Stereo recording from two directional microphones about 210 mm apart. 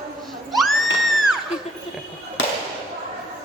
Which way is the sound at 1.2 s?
Centre (ahead or behind).